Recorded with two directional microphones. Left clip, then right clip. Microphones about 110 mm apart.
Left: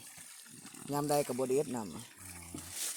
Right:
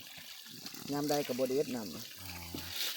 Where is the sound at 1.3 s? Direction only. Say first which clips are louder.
Even; 70° left (ahead or behind).